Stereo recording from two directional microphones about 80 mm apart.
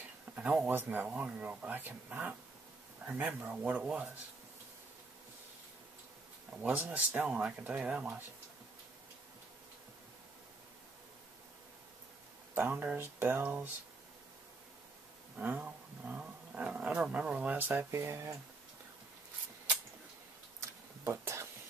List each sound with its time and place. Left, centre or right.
0.4 s speech: centre
6.5 s speech: centre
12.5 s speech: right
15.3 s speech: right
17.6 s speech: right
21.0 s whispering: right